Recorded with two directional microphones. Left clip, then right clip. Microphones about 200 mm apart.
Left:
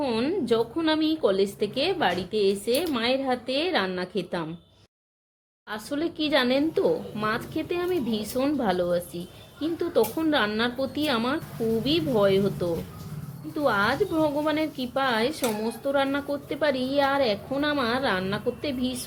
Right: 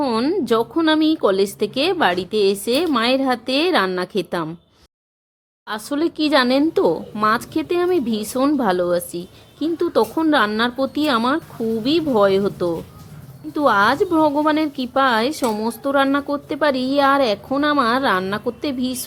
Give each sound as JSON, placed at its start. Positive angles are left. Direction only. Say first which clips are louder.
{"t": 0.0, "sound": "a woman's voice", "louder": "right 7 dB", "side_deg": -30}
{"t": 5.6, "sound": "speech", "louder": "right 8 dB", "side_deg": -25}